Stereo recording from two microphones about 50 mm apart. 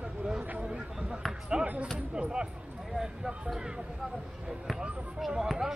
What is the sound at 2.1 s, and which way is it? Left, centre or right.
Speech, centre.